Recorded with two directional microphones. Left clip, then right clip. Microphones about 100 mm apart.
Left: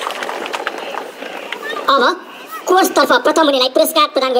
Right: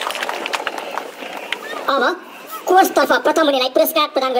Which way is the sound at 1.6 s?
20° left (ahead or behind).